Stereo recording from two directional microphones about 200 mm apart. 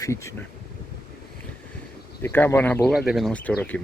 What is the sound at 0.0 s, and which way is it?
Speech, 15° left (ahead or behind).